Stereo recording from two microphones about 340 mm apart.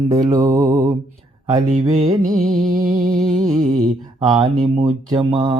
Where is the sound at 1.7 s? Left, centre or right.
Right.